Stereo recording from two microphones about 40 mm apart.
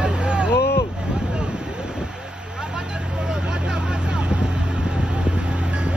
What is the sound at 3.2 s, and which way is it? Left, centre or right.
Vehicle, right.